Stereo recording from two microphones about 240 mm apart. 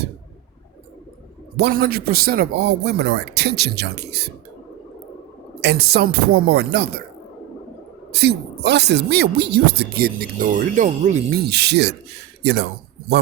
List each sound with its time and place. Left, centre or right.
1.5 s a woman's voice: right
5.5 s speech: right
8.1 s a woman's voice: right